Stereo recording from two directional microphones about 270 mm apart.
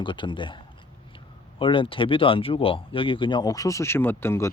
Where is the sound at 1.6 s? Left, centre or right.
Centre.